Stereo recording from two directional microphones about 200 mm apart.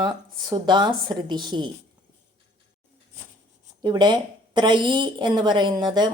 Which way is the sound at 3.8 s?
20° right (ahead or behind).